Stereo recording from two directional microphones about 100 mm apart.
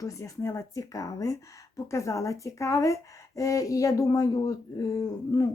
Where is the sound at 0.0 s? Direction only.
30° left (ahead or behind).